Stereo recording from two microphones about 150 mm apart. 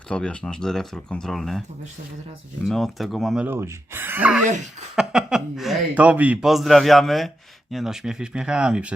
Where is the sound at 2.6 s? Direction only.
Centre (ahead or behind).